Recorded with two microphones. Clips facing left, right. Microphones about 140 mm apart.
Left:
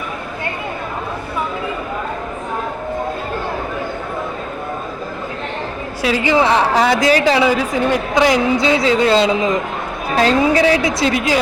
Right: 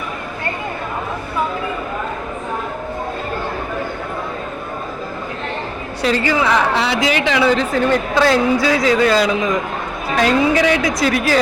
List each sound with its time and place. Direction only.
6.0 s a woman's voice: 5° left (ahead or behind)
6.2 s a man's voice: 30° left (ahead or behind)
6.7 s a woman's voice: 50° left (ahead or behind)
7.1 s speech: 35° left (ahead or behind)
7.4 s a man's voice: 10° left (ahead or behind)